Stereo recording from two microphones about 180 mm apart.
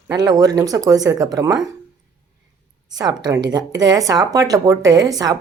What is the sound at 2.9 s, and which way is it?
A woman's voice, 20° right (ahead or behind).